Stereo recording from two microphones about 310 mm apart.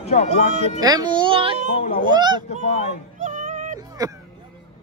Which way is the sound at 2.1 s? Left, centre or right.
Centre.